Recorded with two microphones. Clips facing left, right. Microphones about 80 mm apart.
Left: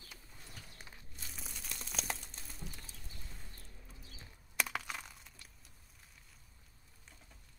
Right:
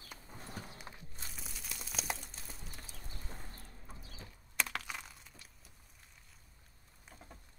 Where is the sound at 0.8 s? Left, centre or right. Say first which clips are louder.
Right 4 dB; right.